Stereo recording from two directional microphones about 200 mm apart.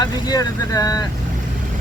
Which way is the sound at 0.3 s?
15° left (ahead or behind).